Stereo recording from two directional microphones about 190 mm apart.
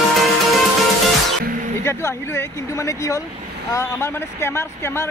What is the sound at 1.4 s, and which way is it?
Music, 45° right (ahead or behind).